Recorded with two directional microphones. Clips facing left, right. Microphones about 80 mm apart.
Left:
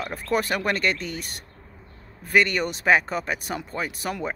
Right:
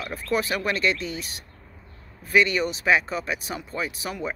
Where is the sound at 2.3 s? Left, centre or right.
Left.